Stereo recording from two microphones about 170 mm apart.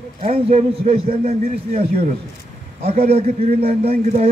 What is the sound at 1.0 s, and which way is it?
Speech, 60° right (ahead or behind).